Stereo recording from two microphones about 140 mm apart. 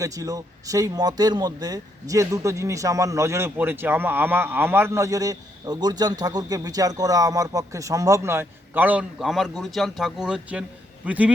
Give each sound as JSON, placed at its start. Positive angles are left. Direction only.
{"t": 0.0, "sound": "speech", "side_deg": -25}